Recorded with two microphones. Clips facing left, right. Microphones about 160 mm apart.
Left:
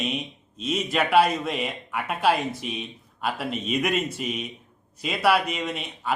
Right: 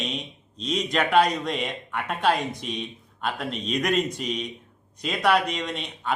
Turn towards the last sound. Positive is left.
turn(degrees=5)  # may be behind; listen again after turning